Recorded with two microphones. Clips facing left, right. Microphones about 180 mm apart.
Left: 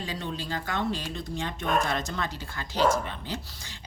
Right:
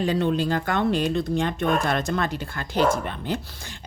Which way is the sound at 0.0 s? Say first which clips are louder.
Right 12 dB; 60° right (ahead or behind).